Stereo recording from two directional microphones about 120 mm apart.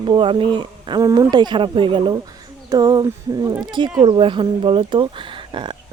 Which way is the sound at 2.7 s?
35° right (ahead or behind).